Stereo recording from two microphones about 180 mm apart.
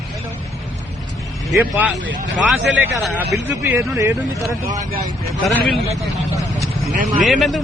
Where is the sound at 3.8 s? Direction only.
15° right (ahead or behind).